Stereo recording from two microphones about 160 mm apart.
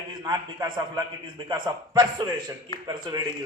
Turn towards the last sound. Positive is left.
turn(degrees=-25)  # may be behind; listen again after turning